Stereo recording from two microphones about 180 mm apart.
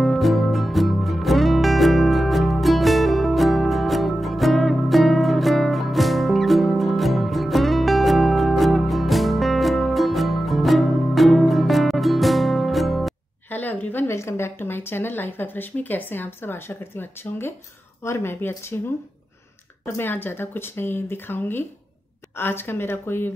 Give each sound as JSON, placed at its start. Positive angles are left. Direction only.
{"t": 0.0, "sound": "music", "side_deg": 0}
{"t": 13.5, "sound": "a sound", "side_deg": 10}
{"t": 18.0, "sound": "speech", "side_deg": 15}
{"t": 20.0, "sound": "speech", "side_deg": 10}